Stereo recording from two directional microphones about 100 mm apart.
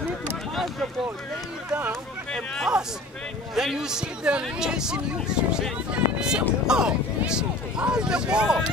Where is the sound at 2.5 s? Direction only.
5° right (ahead or behind).